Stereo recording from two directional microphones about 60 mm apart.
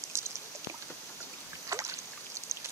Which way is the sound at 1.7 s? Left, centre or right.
Right.